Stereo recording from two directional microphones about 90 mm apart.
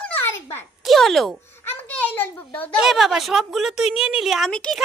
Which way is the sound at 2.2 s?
20° left (ahead or behind).